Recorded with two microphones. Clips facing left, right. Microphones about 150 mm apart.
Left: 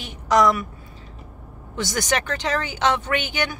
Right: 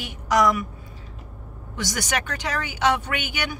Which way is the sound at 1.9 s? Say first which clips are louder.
Left 4 dB; 10° right (ahead or behind).